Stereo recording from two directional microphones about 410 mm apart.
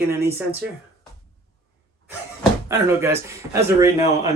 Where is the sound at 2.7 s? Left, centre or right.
Centre.